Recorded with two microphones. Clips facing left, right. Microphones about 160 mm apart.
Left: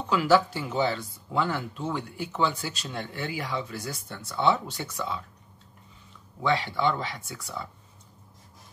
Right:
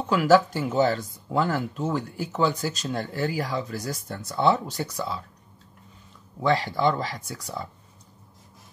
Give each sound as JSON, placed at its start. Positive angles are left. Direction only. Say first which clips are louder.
{"t": 0.1, "sound": "speech", "louder": "right 3 dB", "side_deg": -45}
{"t": 6.4, "sound": "speech", "louder": "right 3 dB", "side_deg": -40}